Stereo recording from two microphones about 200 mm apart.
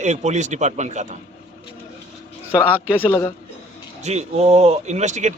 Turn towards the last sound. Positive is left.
turn(degrees=-35)  # may be behind; listen again after turning